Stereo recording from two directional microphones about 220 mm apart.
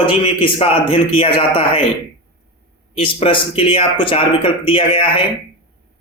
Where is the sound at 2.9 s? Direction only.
25° left (ahead or behind).